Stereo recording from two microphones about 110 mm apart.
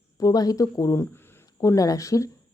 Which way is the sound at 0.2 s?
35° left (ahead or behind).